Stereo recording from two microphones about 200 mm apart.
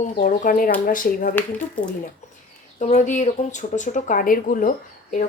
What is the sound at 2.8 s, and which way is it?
Speech, 40° left (ahead or behind).